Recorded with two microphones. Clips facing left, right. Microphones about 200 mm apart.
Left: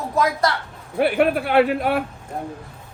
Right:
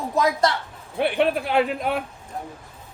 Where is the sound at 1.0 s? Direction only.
5° left (ahead or behind).